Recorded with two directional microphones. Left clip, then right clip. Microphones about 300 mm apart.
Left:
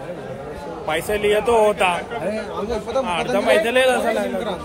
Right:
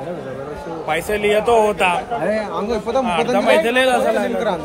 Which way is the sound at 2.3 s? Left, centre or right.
Right.